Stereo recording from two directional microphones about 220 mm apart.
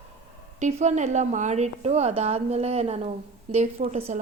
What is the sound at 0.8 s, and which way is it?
A woman's voice, 30° right (ahead or behind).